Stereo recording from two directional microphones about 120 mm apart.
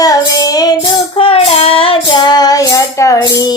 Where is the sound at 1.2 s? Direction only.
55° left (ahead or behind); by 3.2 s 25° left (ahead or behind).